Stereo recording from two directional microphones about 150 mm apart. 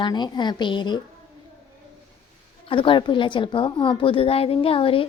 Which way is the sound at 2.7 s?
35° left (ahead or behind).